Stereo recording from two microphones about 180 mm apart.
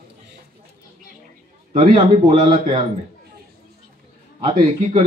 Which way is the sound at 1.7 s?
35° right (ahead or behind).